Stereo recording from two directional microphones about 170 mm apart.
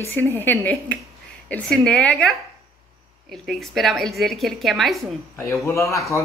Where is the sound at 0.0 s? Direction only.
15° left (ahead or behind).